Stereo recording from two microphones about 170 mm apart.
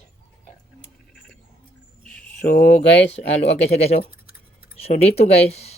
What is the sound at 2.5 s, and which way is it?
Speech, 60° left (ahead or behind).